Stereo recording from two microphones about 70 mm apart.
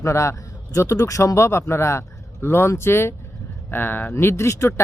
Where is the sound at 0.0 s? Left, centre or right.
Left.